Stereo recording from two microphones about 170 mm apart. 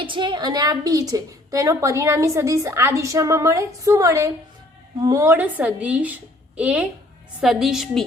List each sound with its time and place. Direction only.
0.0 s a woman's voice: 30° right (ahead or behind); by 8.0 s centre (ahead or behind)